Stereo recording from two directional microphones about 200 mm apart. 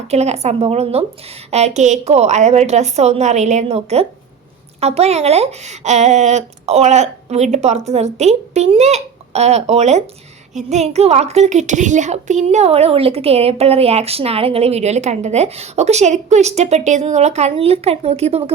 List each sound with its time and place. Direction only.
0.1 s a woman's voice: 35° right (ahead or behind)